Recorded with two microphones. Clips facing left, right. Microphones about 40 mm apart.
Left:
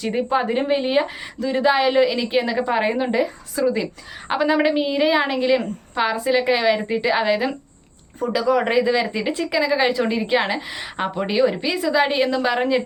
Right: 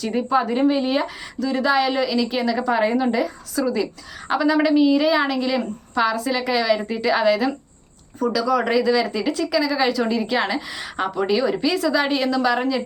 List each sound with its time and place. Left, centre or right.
0.0 s speech: left